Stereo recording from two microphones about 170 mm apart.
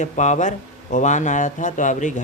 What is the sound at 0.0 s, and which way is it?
Speech, 45° left (ahead or behind).